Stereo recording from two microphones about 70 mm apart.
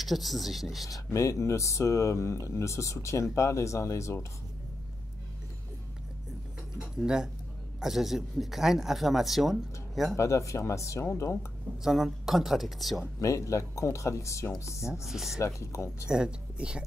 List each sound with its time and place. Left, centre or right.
0.0 s speech: centre
1.1 s speech: left
7.0 s speech: centre
10.1 s speech: left
11.8 s speech: centre
13.0 s speech: left
15.0 s speech: centre
15.3 s speech: left
16.1 s speech: centre